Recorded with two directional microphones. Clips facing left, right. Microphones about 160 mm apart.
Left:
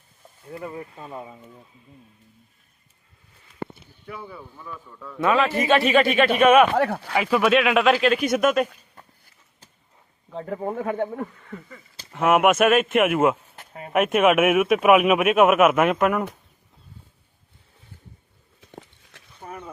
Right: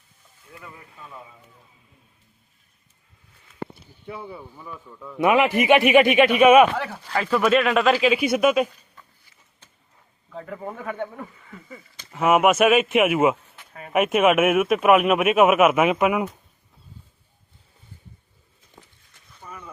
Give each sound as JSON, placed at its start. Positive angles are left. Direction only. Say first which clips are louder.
{"t": 0.4, "sound": "speech", "louder": "left 11 dB", "side_deg": 35}
{"t": 4.0, "sound": "a man's voice", "louder": "right 2 dB", "side_deg": -25}
{"t": 6.7, "sound": "speech", "louder": "left 8 dB", "side_deg": 55}
{"t": 7.1, "sound": "speech", "louder": "right 1 dB", "side_deg": 10}
{"t": 9.0, "sound": "a sound", "louder": "left 2 dB", "side_deg": 45}
{"t": 10.2, "sound": "speech", "louder": "left 5 dB", "side_deg": 30}
{"t": 12.1, "sound": "speech", "louder": "even", "side_deg": 0}
{"t": 18.6, "sound": "a sound", "louder": "left 9 dB", "side_deg": 80}
{"t": 19.4, "sound": "a sound", "louder": "left 4 dB", "side_deg": 50}